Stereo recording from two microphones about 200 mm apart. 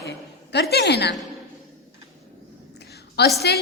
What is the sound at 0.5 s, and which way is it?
Speech, 55° left (ahead or behind).